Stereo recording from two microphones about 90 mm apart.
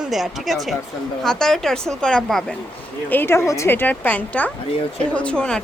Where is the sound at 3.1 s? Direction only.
25° left (ahead or behind).